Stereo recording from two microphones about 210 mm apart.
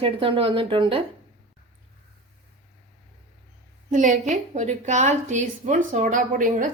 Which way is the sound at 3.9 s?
35° right (ahead or behind).